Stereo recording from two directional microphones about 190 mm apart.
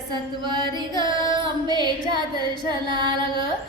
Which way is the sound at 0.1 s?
25° right (ahead or behind).